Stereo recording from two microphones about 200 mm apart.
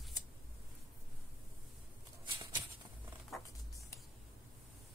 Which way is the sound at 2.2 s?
25° right (ahead or behind).